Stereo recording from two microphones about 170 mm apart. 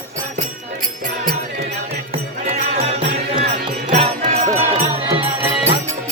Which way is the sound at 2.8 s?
35° right (ahead or behind).